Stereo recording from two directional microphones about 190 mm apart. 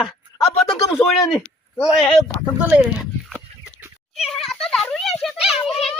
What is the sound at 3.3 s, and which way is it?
Cat, 5° right (ahead or behind).